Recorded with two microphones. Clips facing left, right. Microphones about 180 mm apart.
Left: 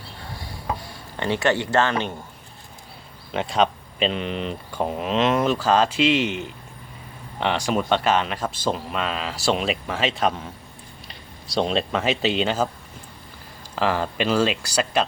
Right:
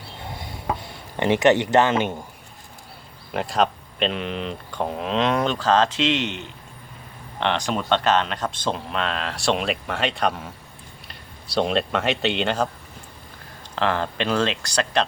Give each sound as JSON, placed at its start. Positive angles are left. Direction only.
{"t": 0.2, "sound": "a sound", "side_deg": -20}
{"t": 3.3, "sound": "speech", "side_deg": 0}
{"t": 11.5, "sound": "speech", "side_deg": 0}
{"t": 13.7, "sound": "speech", "side_deg": 10}